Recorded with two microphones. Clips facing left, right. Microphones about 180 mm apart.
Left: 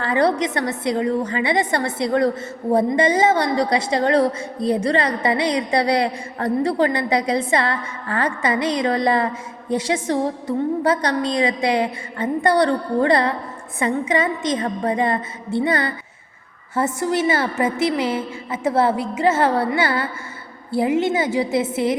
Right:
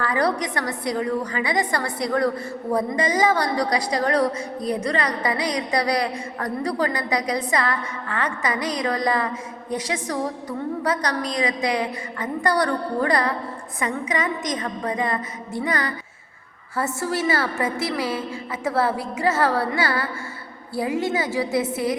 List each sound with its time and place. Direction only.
0.0 s a woman's voice: 25° left (ahead or behind)